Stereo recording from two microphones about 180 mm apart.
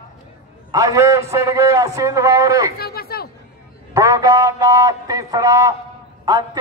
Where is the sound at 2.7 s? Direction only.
60° left (ahead or behind).